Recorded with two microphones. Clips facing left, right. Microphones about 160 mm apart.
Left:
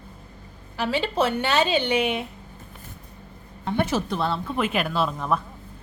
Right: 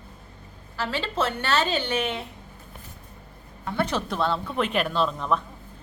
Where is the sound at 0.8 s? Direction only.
15° left (ahead or behind).